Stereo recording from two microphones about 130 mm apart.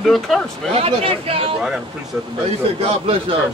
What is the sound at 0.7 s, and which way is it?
Speech, 50° right (ahead or behind).